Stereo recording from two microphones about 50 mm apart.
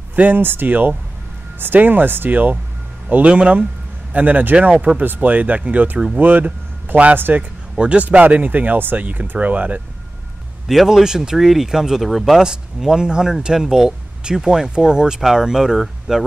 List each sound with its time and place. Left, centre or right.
0.1 s speech: right
3.1 s speech: right
7.2 s a man's voice: right
7.7 s speech: right
10.7 s speech: centre